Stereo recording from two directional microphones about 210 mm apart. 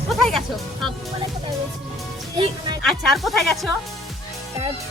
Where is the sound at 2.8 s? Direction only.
Centre (ahead or behind).